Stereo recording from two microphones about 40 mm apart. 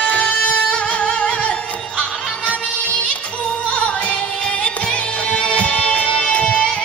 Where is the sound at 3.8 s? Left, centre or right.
Left.